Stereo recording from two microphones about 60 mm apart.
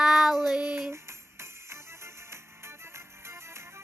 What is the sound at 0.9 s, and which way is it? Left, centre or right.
Music, right.